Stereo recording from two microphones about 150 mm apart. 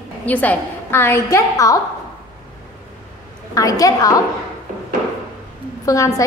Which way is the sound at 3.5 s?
20° left (ahead or behind).